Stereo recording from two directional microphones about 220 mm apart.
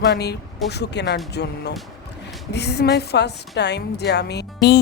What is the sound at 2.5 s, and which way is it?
A woman's voice, 50° left (ahead or behind).